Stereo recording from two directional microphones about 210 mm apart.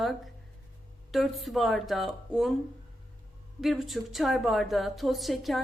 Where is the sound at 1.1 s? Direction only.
Centre (ahead or behind).